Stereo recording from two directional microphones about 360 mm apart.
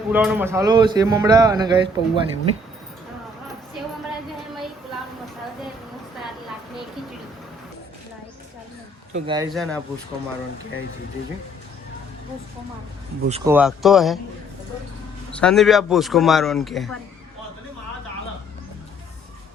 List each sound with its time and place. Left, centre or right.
0.1 s a man's voice: centre
9.1 s a man's voice: centre
9.5 s a man's voice: centre
13.2 s a man's voice: centre
13.5 s a man's voice: centre
15.4 s a man's voice: centre